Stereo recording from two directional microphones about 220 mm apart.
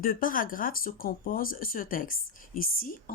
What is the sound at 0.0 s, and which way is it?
A woman's voice, 40° left (ahead or behind).